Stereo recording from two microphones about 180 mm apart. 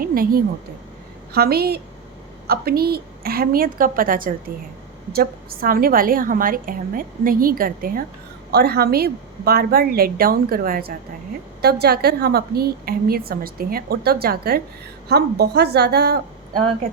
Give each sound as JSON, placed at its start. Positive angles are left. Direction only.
{"t": 0.0, "sound": "a woman's voice", "side_deg": -55}